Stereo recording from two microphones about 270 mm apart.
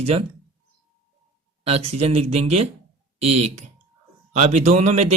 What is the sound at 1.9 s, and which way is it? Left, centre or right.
Speech, right.